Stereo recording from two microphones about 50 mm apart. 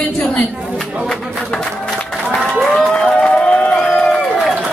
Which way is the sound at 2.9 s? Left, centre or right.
Centre.